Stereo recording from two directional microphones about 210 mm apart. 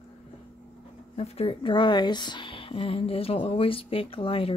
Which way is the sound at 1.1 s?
30° left (ahead or behind).